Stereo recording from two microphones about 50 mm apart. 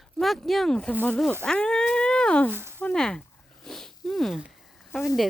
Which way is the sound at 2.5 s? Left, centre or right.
Right.